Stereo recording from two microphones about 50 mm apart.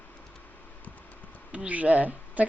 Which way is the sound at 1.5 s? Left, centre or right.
Right.